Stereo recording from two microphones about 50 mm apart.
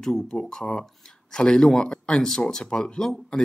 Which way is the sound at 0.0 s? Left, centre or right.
Centre.